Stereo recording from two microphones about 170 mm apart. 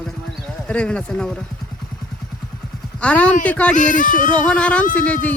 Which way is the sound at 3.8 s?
50° left (ahead or behind).